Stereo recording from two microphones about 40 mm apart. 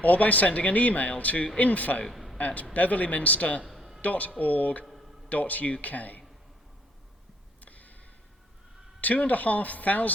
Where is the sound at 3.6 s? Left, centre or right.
Centre.